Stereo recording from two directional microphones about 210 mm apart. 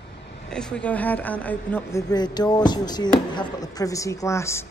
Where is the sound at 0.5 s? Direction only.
5° left (ahead or behind).